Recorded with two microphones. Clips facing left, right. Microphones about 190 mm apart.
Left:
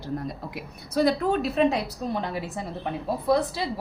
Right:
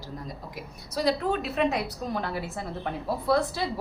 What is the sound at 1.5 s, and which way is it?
A woman's voice, 30° left (ahead or behind).